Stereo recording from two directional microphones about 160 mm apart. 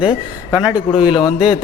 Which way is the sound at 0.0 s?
35° left (ahead or behind).